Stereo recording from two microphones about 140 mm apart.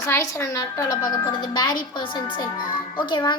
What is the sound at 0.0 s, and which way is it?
Speech, 20° left (ahead or behind).